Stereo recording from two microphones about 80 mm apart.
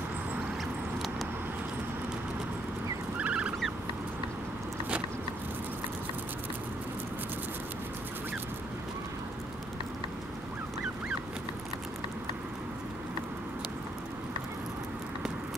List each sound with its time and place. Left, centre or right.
3.2 s fowl: centre